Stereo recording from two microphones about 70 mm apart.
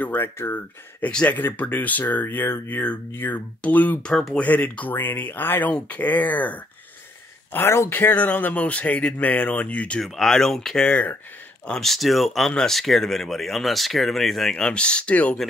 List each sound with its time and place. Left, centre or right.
0.0 s speech: left
1.0 s speech: left
2.7 s speech: centre
4.1 s speech: centre
4.4 s speech: left
7.9 s speech: left
10.0 s speech: centre